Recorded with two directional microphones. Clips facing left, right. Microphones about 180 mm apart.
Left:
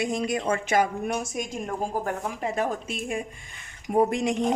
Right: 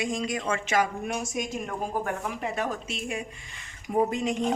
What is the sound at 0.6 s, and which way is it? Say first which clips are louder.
Speech: left 1 dB; 45° left (ahead or behind).